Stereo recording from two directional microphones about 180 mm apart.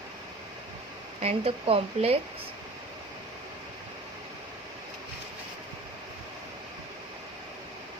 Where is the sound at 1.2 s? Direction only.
35° right (ahead or behind).